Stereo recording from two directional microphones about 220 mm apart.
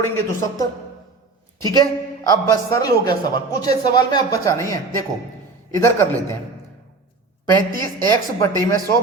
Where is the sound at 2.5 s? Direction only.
15° left (ahead or behind).